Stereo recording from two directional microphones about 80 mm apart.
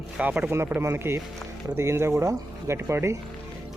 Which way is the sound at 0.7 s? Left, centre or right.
Right.